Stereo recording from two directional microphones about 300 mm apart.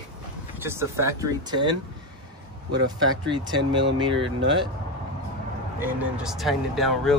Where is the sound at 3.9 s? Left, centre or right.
Centre.